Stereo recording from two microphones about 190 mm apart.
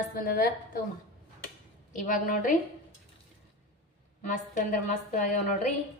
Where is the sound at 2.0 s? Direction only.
45° left (ahead or behind).